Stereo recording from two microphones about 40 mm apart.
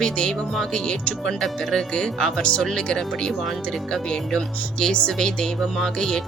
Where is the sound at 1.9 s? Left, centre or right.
Centre.